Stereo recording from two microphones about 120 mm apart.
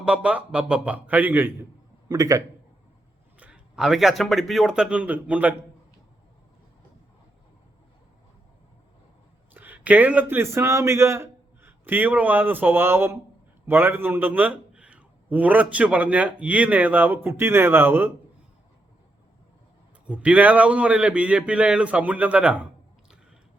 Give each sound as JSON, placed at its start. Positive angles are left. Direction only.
{"t": 0.0, "sound": "a man's voice", "side_deg": -10}
{"t": 2.0, "sound": "a man's voice", "side_deg": -30}
{"t": 3.4, "sound": "a man's voice", "side_deg": -5}
{"t": 9.6, "sound": "a man's voice", "side_deg": -15}
{"t": 20.1, "sound": "a man's voice", "side_deg": -10}